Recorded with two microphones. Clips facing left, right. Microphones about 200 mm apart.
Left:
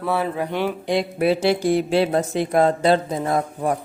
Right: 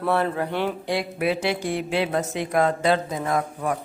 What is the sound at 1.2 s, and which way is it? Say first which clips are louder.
Speech: left 7 dB; 30° left (ahead or behind).